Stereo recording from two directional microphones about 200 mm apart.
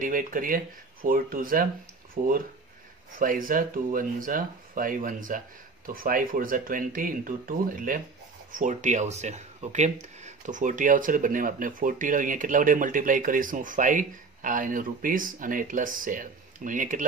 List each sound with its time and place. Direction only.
0.0 s speech: 45° right (ahead or behind)